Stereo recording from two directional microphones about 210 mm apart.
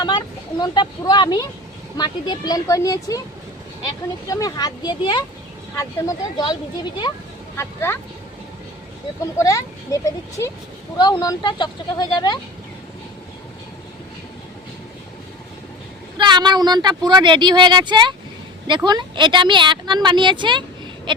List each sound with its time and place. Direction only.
0.0 s speech: 20° left (ahead or behind)
4.3 s speech: 15° left (ahead or behind)
9.4 s speech: 15° left (ahead or behind)
16.1 s speech: 20° right (ahead or behind)